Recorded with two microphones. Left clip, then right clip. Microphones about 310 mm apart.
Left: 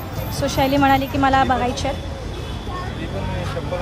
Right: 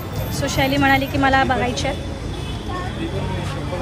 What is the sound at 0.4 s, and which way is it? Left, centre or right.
A woman's voice, centre.